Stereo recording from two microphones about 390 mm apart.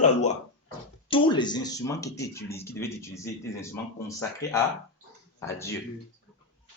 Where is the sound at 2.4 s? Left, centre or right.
Left.